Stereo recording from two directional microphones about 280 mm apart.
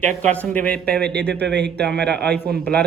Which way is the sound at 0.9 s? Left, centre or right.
Right.